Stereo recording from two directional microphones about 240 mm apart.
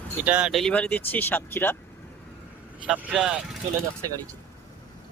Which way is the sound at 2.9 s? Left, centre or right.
Centre.